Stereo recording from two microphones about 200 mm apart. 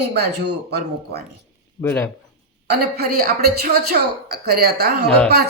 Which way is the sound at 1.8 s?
10° left (ahead or behind).